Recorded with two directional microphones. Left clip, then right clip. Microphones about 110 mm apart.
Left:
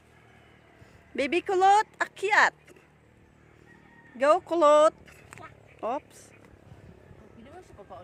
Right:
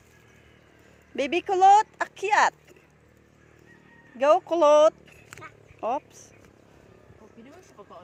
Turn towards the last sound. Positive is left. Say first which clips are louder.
# left 1 dB
turn(degrees=25)  # may be behind; listen again after turning